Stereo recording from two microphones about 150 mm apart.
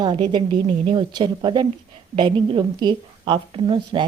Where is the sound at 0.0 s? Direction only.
30° right (ahead or behind).